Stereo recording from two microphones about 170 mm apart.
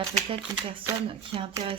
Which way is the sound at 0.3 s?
30° right (ahead or behind).